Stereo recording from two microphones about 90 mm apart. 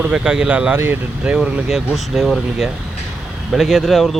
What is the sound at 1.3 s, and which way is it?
Speech, 10° right (ahead or behind).